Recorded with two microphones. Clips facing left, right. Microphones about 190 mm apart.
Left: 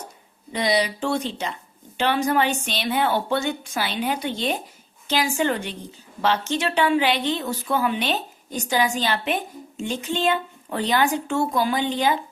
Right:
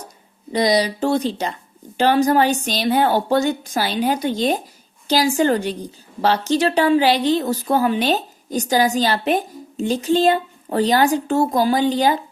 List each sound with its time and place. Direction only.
0.5 s a woman's voice: 40° right (ahead or behind)